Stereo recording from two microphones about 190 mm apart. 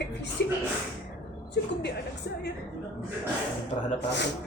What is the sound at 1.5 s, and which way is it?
Speech, 60° left (ahead or behind).